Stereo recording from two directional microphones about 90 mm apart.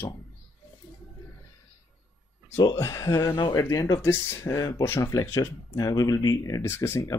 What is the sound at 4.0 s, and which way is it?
Speech, 30° left (ahead or behind).